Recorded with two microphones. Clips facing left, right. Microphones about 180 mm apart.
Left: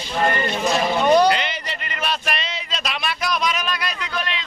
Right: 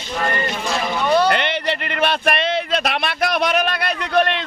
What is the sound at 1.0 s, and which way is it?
Speech, 15° left (ahead or behind).